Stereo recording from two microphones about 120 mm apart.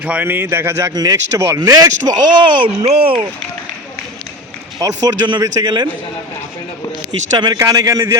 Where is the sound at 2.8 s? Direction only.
55° right (ahead or behind).